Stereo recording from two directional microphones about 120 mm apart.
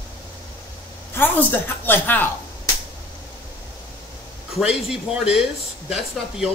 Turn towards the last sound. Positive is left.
turn(degrees=-5)  # may be behind; listen again after turning